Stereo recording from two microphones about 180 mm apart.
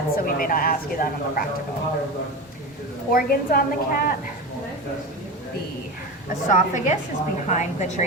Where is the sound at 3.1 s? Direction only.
55° left (ahead or behind).